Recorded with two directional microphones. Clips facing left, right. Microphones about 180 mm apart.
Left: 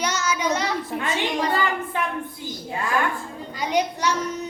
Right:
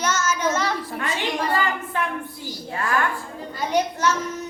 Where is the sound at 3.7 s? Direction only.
15° left (ahead or behind).